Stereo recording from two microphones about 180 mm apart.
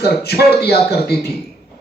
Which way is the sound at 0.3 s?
60° left (ahead or behind).